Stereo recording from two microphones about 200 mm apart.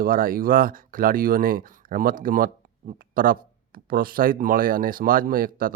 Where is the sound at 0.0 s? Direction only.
45° right (ahead or behind).